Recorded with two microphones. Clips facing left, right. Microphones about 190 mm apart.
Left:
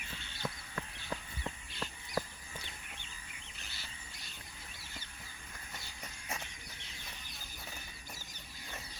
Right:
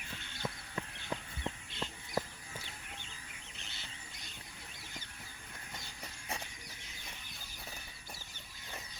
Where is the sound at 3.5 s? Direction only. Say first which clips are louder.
Even; 25° right (ahead or behind).